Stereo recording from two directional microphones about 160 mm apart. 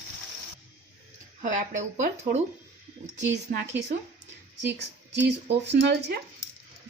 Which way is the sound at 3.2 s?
90° right.